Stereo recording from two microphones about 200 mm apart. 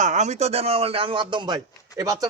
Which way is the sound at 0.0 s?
35° right (ahead or behind).